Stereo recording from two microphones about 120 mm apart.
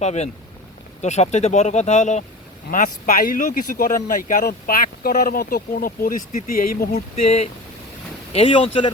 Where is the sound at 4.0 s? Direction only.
90° left.